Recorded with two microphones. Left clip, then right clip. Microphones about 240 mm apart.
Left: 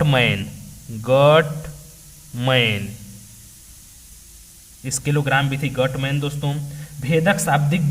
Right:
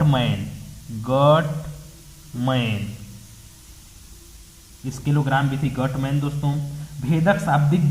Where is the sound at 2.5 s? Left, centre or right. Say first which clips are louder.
Left 7 dB; left.